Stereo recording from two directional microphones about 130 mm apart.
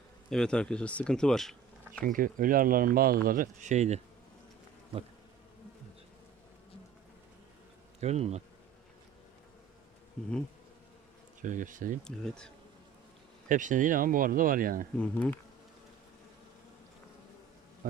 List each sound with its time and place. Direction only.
0.3 s speech: 5° left (ahead or behind)
2.0 s speech: 90° right; by 4.0 s 60° right (ahead or behind)
8.0 s speech: 55° right (ahead or behind)
11.4 s speech: 85° right
12.0 s speech: 5° left (ahead or behind)
13.5 s speech: 80° right
14.9 s speech: 10° left (ahead or behind)